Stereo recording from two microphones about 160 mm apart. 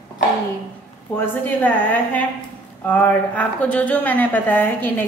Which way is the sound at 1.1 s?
15° left (ahead or behind).